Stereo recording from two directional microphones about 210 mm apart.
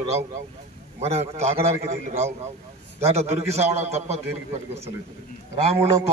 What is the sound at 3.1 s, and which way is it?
A man's voice, 30° right (ahead or behind).